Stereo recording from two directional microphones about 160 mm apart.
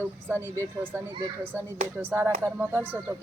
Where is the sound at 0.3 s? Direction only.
15° right (ahead or behind).